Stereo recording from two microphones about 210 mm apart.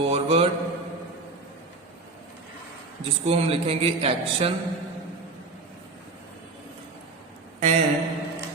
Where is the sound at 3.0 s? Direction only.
30° right (ahead or behind).